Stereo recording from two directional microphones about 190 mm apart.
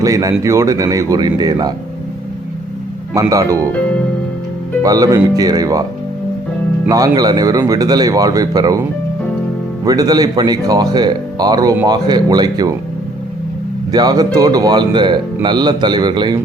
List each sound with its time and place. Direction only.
0.0 s speech: 15° right (ahead or behind)
3.2 s speech: 15° right (ahead or behind)
4.8 s speech: 20° right (ahead or behind)
6.8 s speech: 20° right (ahead or behind)
9.8 s speech: 20° right (ahead or behind)
13.9 s speech: 20° right (ahead or behind)